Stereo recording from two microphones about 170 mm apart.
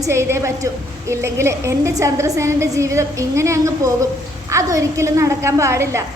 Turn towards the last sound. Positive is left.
turn(degrees=-15)  # may be behind; listen again after turning